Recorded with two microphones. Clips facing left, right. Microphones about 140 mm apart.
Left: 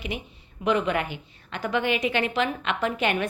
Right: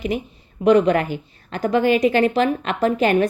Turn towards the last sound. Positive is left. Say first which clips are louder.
# right 8 dB
turn(degrees=-40)  # may be behind; listen again after turning